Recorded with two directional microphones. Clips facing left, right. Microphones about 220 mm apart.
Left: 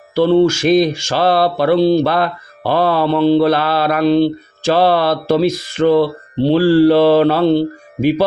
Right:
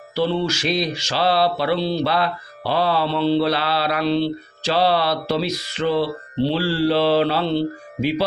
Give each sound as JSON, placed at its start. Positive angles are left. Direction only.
{"t": 0.1, "sound": "mantra", "side_deg": 50}